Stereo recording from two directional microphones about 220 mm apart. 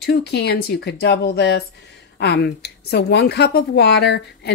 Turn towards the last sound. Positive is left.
turn(degrees=50)  # may be behind; listen again after turning